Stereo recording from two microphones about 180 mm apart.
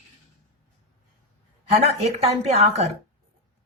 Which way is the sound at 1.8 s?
35° right (ahead or behind).